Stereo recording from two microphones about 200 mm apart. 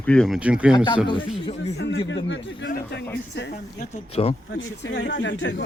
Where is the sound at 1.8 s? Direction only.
60° left (ahead or behind).